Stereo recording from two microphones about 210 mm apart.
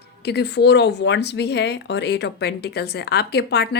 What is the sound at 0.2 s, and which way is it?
Speech, 50° left (ahead or behind).